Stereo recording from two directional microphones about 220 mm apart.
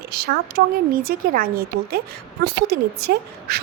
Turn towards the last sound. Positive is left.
turn(degrees=-45)  # may be behind; listen again after turning